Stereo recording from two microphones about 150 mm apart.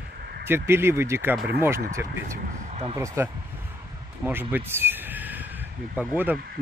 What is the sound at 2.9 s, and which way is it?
Speech, 20° right (ahead or behind).